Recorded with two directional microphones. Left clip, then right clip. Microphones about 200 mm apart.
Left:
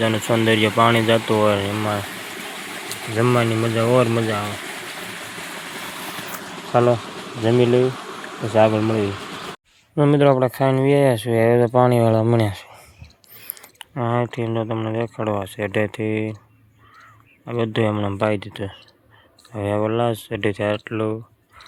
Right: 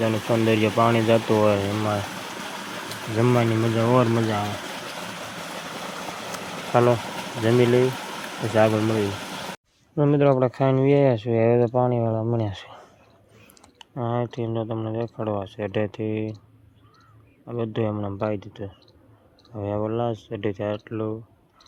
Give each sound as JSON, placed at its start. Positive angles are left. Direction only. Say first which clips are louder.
{"t": 0.0, "sound": "speech", "louder": "left 3 dB", "side_deg": 5}
{"t": 3.2, "sound": "speech", "louder": "left 3 dB", "side_deg": 5}
{"t": 6.3, "sound": "a sound", "louder": "left 2 dB", "side_deg": 5}
{"t": 7.4, "sound": "speech", "louder": "left 2 dB", "side_deg": 10}
{"t": 9.9, "sound": "speech", "louder": "left 4 dB", "side_deg": 10}
{"t": 11.7, "sound": "speech", "louder": "left 7 dB", "side_deg": 15}
{"t": 13.6, "sound": "speech", "louder": "left 5 dB", "side_deg": 10}